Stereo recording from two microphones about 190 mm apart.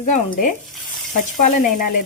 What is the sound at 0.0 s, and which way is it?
Speech, 40° left (ahead or behind).